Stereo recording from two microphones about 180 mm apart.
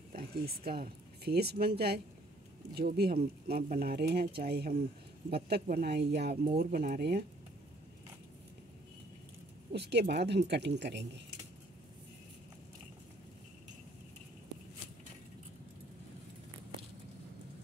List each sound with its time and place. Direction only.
0.1 s a sound: 55° right (ahead or behind)
0.7 s speech: 60° right (ahead or behind)
2.7 s speech: 60° right (ahead or behind)
9.7 s speech: 70° right (ahead or behind)